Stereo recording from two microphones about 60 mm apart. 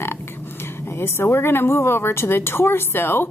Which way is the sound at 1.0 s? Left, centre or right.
Left.